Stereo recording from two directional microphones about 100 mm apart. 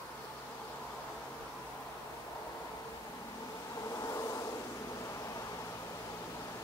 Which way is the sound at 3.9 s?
35° left (ahead or behind).